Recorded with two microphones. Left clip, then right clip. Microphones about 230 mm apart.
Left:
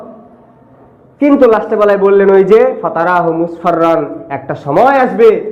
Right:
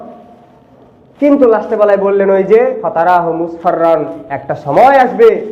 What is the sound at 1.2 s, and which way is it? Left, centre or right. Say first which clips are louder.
A man's voice: left 1 dB; left.